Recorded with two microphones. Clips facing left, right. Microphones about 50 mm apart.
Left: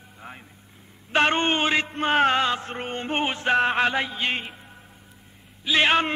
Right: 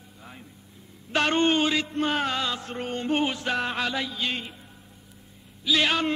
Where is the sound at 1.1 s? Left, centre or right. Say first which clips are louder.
Left 1 dB; left.